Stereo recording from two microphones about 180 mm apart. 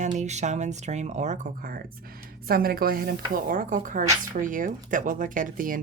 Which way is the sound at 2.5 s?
55° right (ahead or behind).